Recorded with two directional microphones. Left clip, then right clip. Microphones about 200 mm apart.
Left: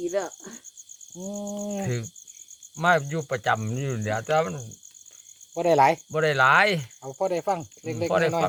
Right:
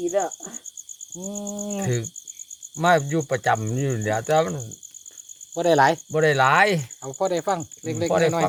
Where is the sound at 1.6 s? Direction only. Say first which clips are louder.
Right 2 dB; centre (ahead or behind).